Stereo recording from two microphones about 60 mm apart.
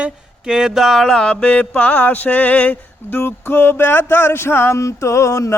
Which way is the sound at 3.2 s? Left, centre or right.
Left.